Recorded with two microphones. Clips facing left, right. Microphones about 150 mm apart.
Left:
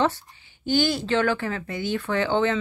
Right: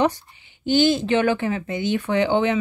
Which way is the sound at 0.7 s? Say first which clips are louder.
Right 4 dB; 20° right (ahead or behind).